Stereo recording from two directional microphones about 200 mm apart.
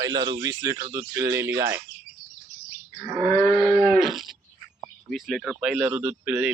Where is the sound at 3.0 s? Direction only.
5° left (ahead or behind).